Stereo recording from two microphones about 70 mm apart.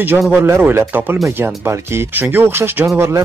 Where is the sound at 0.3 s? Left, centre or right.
Right.